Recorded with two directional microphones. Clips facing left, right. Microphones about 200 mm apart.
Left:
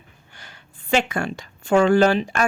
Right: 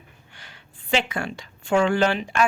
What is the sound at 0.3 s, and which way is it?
A woman's voice, 45° left (ahead or behind).